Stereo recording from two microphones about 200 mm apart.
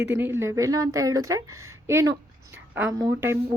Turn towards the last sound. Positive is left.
turn(degrees=-15)  # may be behind; listen again after turning